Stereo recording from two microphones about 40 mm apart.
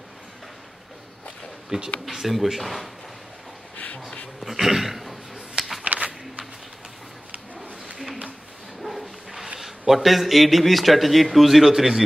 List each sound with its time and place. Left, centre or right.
1.7 s speech: centre
2.0 s a man's voice: centre
3.7 s a sound: left
4.4 s dog: centre
5.9 s a sound: right
8.8 s bow-wow: centre
9.6 s a man's voice: centre